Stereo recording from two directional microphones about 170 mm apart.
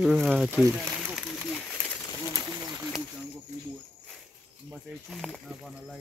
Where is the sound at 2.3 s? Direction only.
20° right (ahead or behind).